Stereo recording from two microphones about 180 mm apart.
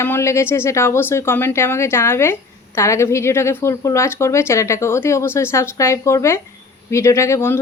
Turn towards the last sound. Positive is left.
turn(degrees=15)  # may be behind; listen again after turning